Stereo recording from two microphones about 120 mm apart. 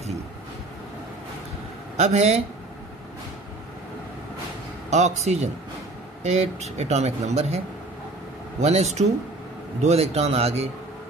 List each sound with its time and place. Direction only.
2.0 s speech: 65° right (ahead or behind)
4.8 s a man's voice: 70° right (ahead or behind)